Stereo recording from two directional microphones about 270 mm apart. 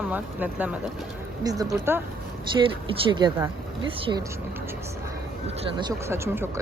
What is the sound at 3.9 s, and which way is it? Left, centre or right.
Speech, centre.